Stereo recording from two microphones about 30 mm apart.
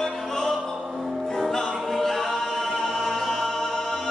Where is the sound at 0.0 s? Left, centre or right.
Centre.